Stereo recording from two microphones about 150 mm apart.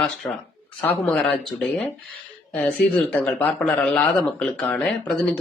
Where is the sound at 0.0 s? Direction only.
Centre (ahead or behind).